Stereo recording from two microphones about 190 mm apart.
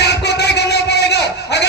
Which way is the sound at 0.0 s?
60° left (ahead or behind).